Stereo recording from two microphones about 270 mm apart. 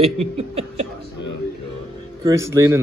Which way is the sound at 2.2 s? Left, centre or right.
Centre.